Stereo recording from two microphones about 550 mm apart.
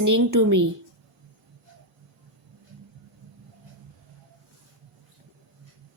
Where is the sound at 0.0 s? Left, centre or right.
Right.